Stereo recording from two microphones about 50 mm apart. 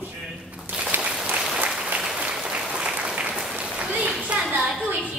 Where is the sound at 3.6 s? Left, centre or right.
Right.